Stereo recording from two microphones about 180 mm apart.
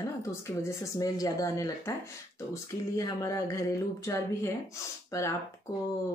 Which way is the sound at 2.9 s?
20° left (ahead or behind).